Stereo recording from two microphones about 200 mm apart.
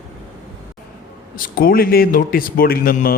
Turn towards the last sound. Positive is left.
turn(degrees=45)  # may be behind; listen again after turning